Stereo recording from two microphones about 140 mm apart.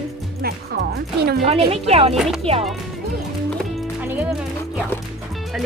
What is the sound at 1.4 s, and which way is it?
Speech, 45° right (ahead or behind).